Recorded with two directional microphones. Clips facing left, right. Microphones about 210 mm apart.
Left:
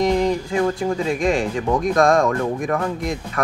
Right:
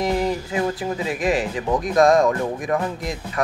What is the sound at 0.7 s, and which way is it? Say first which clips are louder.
Speech: left 4 dB; 5° right (ahead or behind).